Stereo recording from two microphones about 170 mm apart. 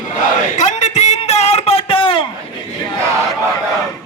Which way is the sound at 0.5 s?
45° left (ahead or behind).